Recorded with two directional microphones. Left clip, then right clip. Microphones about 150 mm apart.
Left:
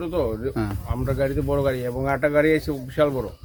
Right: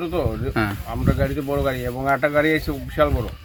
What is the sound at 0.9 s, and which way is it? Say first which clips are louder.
Speech: left 4 dB; 35° left (ahead or behind).